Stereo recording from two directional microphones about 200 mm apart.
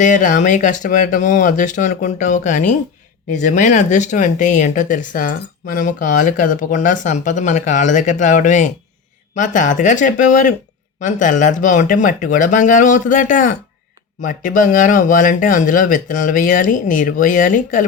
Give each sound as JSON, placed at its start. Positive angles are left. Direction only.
{"t": 0.0, "sound": "speech", "side_deg": 40}